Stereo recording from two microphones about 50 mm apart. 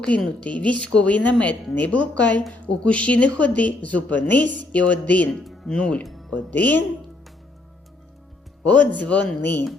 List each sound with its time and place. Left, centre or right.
0.3 s a woman's voice: left
5.3 s speech: centre
5.6 s a woman's voice: centre
6.0 s music: centre
6.5 s speech: left
8.6 s speech: left